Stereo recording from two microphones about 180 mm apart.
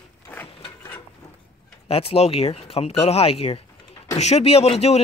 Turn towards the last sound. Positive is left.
turn(degrees=35)  # may be behind; listen again after turning